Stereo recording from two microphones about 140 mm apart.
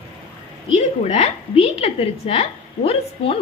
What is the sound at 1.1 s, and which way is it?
A woman's voice, 50° left (ahead or behind).